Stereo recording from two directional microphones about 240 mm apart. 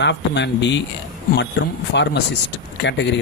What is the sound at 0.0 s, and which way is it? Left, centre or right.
Speech, left.